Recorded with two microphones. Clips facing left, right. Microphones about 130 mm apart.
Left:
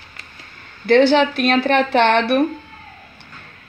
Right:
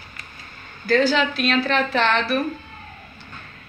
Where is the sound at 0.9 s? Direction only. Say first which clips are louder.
Left 6 dB; 65° left (ahead or behind).